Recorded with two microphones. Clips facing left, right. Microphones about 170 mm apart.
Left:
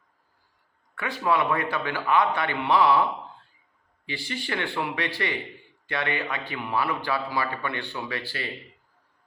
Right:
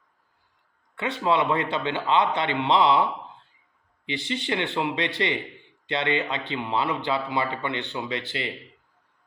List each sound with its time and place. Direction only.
0.9 s speech: 25° right (ahead or behind)